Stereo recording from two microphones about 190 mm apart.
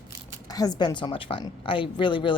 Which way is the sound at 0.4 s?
20° left (ahead or behind).